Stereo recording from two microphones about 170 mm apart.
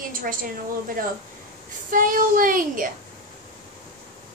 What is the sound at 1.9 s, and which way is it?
A woman's voice, 55° right (ahead or behind).